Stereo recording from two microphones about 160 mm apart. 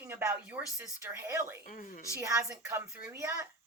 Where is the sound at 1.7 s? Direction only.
55° left (ahead or behind).